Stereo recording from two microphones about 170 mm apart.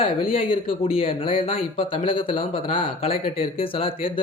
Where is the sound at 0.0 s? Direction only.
35° left (ahead or behind).